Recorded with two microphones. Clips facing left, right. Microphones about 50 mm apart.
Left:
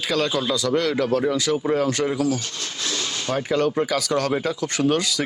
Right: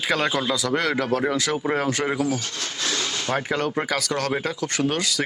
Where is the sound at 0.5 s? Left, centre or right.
Centre.